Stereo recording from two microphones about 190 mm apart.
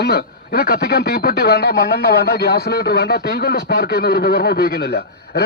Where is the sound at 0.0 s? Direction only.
55° left (ahead or behind).